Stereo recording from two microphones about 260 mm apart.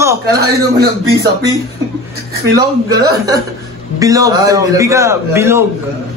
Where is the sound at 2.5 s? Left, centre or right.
Centre.